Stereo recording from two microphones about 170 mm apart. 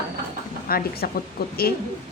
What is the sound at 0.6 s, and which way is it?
Speech, 60° left (ahead or behind).